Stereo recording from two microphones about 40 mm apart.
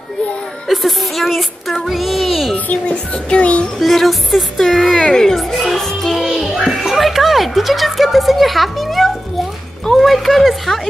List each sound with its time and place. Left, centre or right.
0.7 s a child's voice: centre
2.5 s a child's voice: left
3.8 s speech: centre
5.4 s music: centre
6.1 s music: centre
7.0 s a sound: centre
9.9 s speech: centre